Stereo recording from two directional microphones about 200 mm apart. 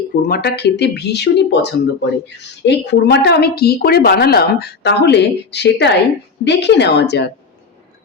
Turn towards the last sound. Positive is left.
turn(degrees=55)  # may be behind; listen again after turning